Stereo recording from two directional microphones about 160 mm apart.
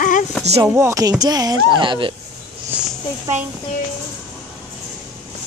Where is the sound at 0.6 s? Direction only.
15° right (ahead or behind).